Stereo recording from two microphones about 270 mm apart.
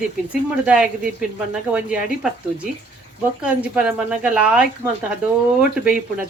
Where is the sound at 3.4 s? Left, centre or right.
Centre.